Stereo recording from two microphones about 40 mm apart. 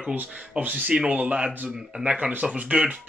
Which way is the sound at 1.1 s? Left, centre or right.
Right.